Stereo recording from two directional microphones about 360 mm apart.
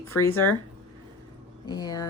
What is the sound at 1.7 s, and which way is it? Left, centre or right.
Speech, centre.